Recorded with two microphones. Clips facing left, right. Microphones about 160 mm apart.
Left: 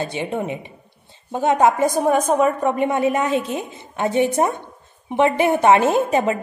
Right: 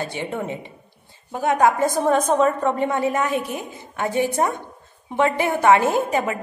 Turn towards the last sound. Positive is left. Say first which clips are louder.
# left 3 dB
turn(degrees=25)  # may be behind; listen again after turning